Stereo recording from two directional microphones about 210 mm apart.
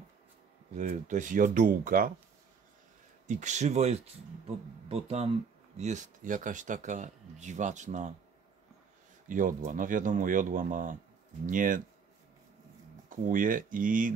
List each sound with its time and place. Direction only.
0.7 s speech: 35° right (ahead or behind)
3.3 s speech: 35° right (ahead or behind)
9.3 s speech: 35° right (ahead or behind)
13.1 s speech: 40° right (ahead or behind)